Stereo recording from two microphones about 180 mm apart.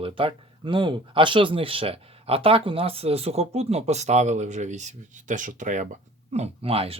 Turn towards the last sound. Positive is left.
turn(degrees=-35)  # may be behind; listen again after turning